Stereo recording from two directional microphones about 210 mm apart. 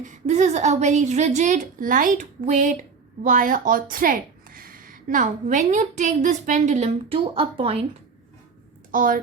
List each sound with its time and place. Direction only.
0.0 s speech: 35° right (ahead or behind)
8.9 s speech: 40° right (ahead or behind)